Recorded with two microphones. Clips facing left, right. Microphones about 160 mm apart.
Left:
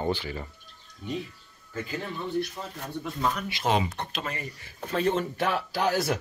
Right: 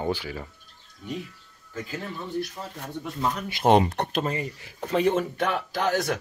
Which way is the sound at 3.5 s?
55° right (ahead or behind).